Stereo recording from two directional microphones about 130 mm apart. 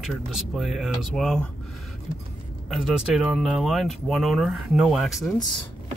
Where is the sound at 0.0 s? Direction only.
5° right (ahead or behind).